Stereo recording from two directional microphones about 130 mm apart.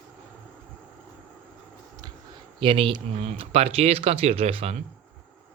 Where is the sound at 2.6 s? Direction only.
45° right (ahead or behind).